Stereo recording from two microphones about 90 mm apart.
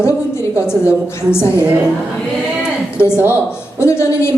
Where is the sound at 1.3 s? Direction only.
30° left (ahead or behind).